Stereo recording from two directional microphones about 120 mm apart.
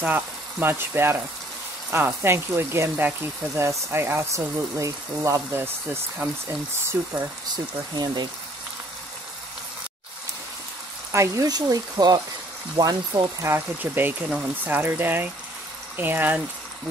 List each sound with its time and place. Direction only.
0.0 s speech: 15° right (ahead or behind)
7.5 s speech: 35° right (ahead or behind)
11.1 s speech: 25° right (ahead or behind)
13.5 s speech: 15° right (ahead or behind)